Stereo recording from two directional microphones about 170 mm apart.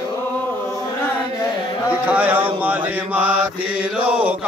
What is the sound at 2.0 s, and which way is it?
Mantra, 10° right (ahead or behind).